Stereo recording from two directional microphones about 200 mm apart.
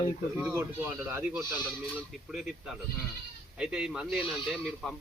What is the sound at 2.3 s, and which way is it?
Speech, 5° right (ahead or behind).